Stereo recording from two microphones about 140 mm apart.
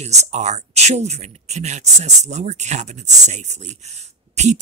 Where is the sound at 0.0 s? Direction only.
50° right (ahead or behind).